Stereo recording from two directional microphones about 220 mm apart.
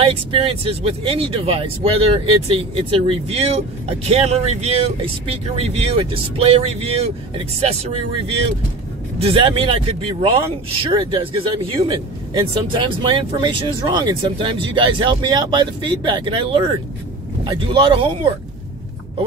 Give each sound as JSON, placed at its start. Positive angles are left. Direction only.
{"t": 0.0, "sound": "speech", "side_deg": -25}
{"t": 9.2, "sound": "speech", "side_deg": -25}